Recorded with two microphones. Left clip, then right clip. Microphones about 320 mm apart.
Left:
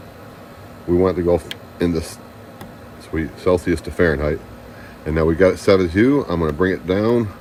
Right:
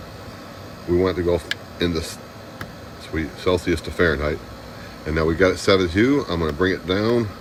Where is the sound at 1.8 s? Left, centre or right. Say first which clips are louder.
Left 4 dB; centre.